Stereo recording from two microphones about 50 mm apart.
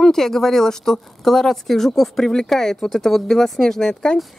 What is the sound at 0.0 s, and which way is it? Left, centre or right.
Speech, centre.